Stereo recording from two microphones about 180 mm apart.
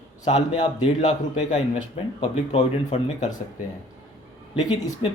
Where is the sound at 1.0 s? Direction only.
40° left (ahead or behind).